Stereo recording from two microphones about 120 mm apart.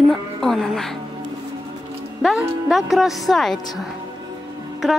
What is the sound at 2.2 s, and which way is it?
A woman's voice, 5° right (ahead or behind).